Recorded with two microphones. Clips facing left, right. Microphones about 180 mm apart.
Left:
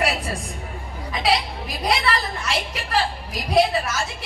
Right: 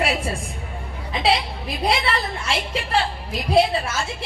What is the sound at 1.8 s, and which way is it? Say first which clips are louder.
A woman's voice: even; 25° right (ahead or behind).